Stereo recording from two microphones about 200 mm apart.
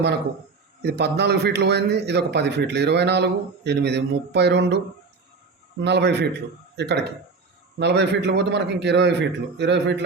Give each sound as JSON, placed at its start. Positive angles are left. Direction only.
{"t": 0.8, "sound": "a man's voice", "side_deg": -55}
{"t": 5.8, "sound": "a man's voice", "side_deg": -55}